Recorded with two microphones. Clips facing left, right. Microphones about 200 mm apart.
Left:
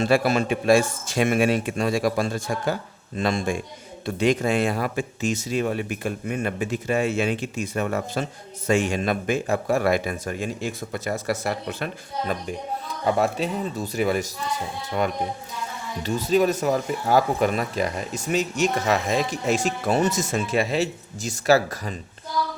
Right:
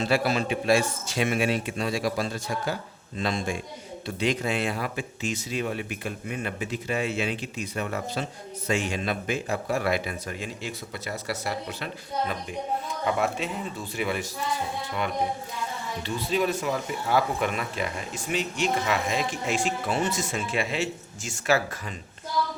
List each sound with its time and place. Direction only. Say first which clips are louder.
0.0 s speech: left 4 dB; 50° left (ahead or behind)
13.1 s speech: left 5 dB; 35° left (ahead or behind)
16.0 s speech: left 6 dB; 40° left (ahead or behind)